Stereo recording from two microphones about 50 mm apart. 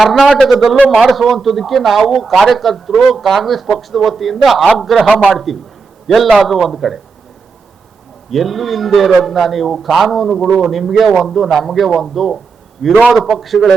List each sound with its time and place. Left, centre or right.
0.0 s a man's voice: centre
5.0 s a man's voice: right
6.1 s a man's voice: centre
8.3 s a man's voice: centre